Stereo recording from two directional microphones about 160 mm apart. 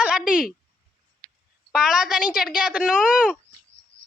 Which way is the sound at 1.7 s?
5° right (ahead or behind).